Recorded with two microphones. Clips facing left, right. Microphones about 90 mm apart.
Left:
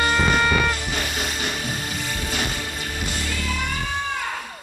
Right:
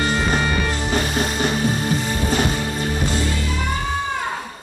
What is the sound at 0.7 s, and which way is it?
Music, 35° right (ahead or behind).